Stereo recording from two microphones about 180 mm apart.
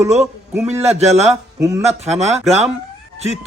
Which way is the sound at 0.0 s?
35° right (ahead or behind).